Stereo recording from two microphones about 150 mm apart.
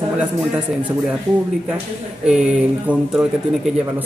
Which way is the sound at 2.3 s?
10° right (ahead or behind).